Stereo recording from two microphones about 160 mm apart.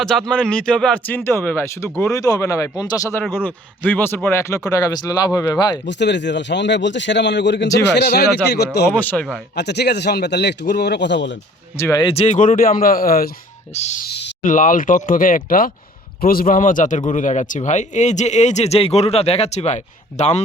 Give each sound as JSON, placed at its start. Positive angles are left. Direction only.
{"t": 0.0, "sound": "speech", "side_deg": 0}
{"t": 5.8, "sound": "a man's voice", "side_deg": 90}
{"t": 8.9, "sound": "speech", "side_deg": 10}
{"t": 9.6, "sound": "a man's voice", "side_deg": 90}
{"t": 11.8, "sound": "speech", "side_deg": 20}
{"t": 12.0, "sound": "speech", "side_deg": 40}
{"t": 13.7, "sound": "speech", "side_deg": 45}
{"t": 14.0, "sound": "a sound", "side_deg": 90}
{"t": 14.4, "sound": "speech", "side_deg": 55}